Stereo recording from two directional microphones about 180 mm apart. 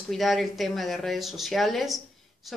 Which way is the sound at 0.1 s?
Centre (ahead or behind).